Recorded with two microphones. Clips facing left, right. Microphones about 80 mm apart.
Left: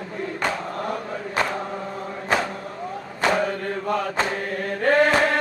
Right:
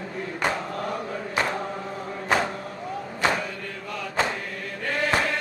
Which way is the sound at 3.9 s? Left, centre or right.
Left.